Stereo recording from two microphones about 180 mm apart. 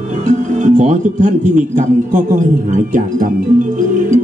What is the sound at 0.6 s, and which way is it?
Speech, 45° right (ahead or behind).